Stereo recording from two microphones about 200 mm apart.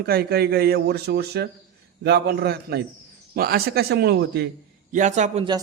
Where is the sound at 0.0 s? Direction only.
50° right (ahead or behind).